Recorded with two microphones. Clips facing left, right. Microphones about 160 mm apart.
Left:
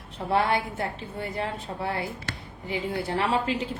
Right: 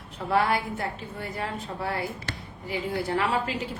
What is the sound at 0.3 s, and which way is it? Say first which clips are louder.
A woman's voice: even; 25° left (ahead or behind).